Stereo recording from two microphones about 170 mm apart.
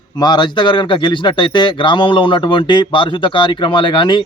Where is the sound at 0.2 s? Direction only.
25° left (ahead or behind).